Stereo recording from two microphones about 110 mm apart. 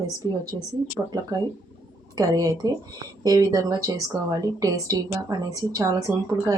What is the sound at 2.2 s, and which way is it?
A woman's voice, 35° right (ahead or behind).